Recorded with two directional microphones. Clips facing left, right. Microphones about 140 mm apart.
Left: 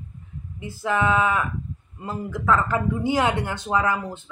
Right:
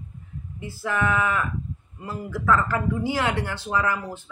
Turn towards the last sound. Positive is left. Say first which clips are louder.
# left 2 dB
turn(degrees=25)  # may be behind; listen again after turning